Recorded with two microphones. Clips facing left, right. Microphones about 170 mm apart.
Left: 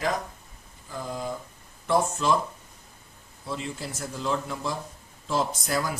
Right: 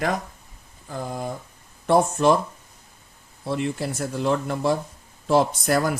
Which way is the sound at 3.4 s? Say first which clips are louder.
Right 8 dB; 60° right (ahead or behind).